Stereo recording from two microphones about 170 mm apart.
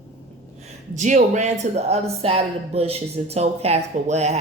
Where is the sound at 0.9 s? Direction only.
45° right (ahead or behind).